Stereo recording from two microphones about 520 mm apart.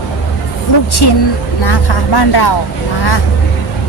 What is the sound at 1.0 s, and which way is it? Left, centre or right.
A woman's voice, left.